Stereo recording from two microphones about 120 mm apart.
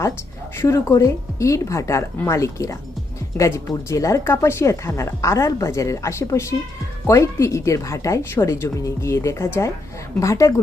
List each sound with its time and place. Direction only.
0.5 s speech: 25° left (ahead or behind)